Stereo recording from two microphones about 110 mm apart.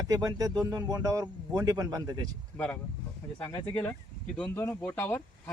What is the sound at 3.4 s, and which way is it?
Speech, 25° left (ahead or behind).